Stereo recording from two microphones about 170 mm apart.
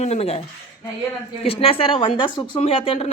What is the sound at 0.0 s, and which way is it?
Speech, 40° left (ahead or behind).